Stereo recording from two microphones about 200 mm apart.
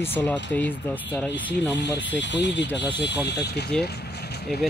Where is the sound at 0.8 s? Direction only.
10° left (ahead or behind).